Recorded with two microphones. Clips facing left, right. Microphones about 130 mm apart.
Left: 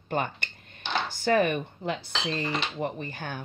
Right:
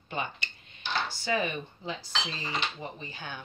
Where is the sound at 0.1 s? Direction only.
50° left (ahead or behind).